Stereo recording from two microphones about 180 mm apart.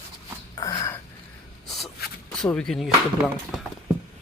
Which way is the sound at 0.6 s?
20° left (ahead or behind).